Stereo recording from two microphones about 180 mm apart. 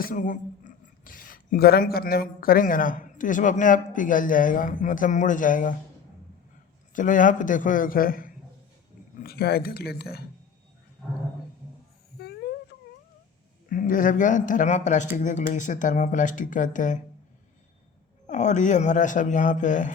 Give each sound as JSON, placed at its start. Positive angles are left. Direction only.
{"t": 0.0, "sound": "speech", "side_deg": 45}
{"t": 6.9, "sound": "speech", "side_deg": 45}
{"t": 12.2, "sound": "dog", "side_deg": 65}
{"t": 13.7, "sound": "speech", "side_deg": 50}
{"t": 18.3, "sound": "speech", "side_deg": 40}